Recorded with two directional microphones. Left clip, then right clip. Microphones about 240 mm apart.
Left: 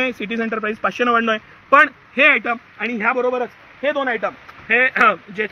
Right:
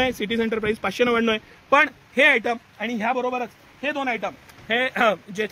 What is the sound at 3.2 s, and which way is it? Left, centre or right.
Speech, right.